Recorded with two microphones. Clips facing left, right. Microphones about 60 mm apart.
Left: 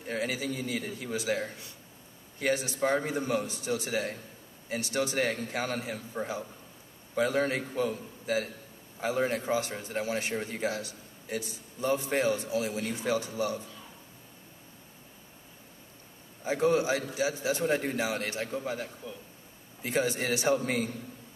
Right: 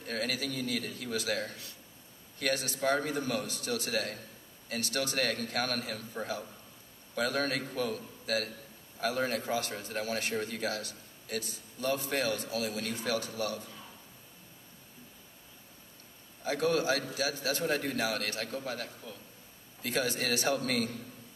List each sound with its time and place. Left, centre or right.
0.0 s a man's voice: left
16.4 s a man's voice: left